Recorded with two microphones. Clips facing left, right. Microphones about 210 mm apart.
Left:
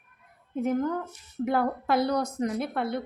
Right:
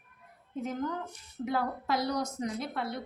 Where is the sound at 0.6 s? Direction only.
55° left (ahead or behind).